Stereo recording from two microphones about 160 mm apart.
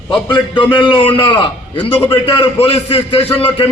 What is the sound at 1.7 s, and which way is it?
Speech, 15° left (ahead or behind).